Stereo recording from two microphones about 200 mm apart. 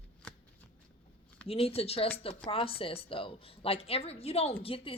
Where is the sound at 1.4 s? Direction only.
30° left (ahead or behind).